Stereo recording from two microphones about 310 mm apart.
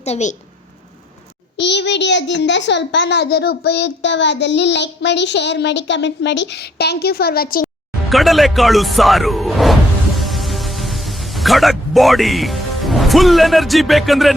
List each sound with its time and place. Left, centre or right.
0.0 s a woman's voice: left
1.5 s a child's voice: left
8.1 s speech: centre
10.2 s music: centre